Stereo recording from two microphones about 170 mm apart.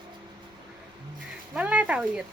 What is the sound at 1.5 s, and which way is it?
Speech, 10° right (ahead or behind).